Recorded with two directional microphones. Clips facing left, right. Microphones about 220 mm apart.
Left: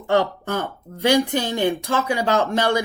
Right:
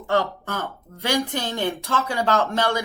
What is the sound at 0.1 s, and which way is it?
Speech, 20° left (ahead or behind).